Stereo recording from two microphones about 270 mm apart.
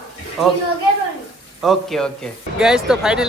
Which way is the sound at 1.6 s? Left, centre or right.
Centre.